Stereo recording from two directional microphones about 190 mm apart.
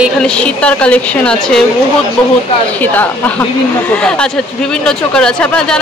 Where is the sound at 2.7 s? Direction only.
10° left (ahead or behind).